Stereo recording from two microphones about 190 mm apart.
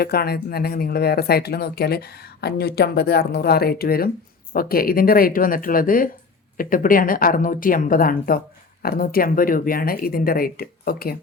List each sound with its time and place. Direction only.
0.0 s speech: 55° left (ahead or behind)